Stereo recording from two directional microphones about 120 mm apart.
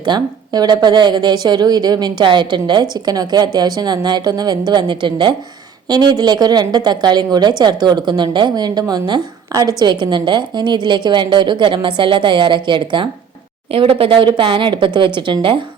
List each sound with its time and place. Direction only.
0.0 s a woman's voice: 35° right (ahead or behind)